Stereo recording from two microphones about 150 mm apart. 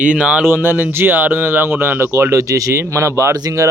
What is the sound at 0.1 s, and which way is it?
Speech, 10° right (ahead or behind).